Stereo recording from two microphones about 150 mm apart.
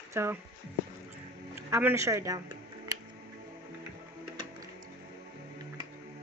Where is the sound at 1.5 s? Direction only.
15° right (ahead or behind).